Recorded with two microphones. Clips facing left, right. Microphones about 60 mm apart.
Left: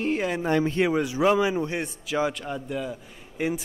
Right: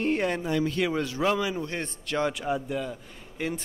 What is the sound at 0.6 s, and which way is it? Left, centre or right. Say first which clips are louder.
Speech: left 3 dB; left.